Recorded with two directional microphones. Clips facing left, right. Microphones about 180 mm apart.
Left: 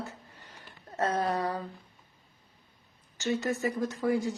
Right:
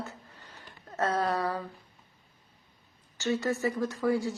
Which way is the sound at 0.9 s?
20° left (ahead or behind).